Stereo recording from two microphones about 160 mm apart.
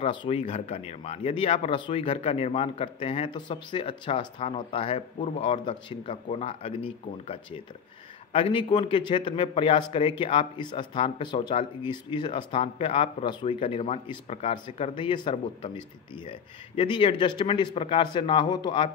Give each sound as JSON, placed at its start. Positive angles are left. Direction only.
{"t": 0.0, "sound": "speech", "side_deg": 30}
{"t": 8.3, "sound": "a man's voice", "side_deg": 35}